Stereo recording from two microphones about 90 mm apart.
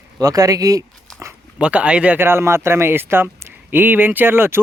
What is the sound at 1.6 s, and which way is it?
Speech, 15° right (ahead or behind).